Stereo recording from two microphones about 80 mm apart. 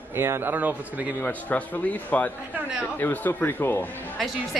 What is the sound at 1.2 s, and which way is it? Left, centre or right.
A man's voice, centre.